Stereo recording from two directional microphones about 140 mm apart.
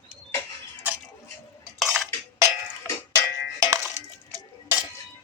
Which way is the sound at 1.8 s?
Centre (ahead or behind).